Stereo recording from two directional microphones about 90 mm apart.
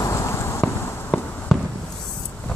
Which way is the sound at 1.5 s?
Centre (ahead or behind).